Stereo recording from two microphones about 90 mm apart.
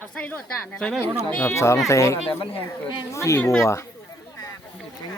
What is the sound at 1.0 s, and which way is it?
Speech, 25° left (ahead or behind).